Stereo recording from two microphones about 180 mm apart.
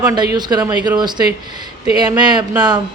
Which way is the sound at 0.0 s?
20° right (ahead or behind).